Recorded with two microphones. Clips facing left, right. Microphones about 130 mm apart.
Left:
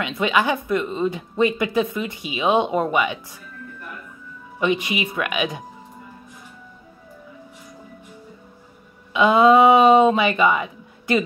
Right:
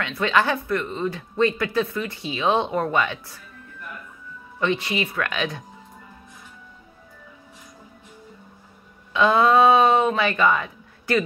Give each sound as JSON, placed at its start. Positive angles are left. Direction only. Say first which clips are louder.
{"t": 0.0, "sound": "speech", "louder": "left 1 dB", "side_deg": 15}
{"t": 4.6, "sound": "speech", "louder": "left 2 dB", "side_deg": 15}
{"t": 9.1, "sound": "speech", "louder": "left 3 dB", "side_deg": 15}